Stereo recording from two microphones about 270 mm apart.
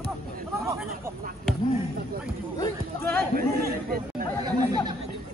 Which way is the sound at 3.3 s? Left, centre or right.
Right.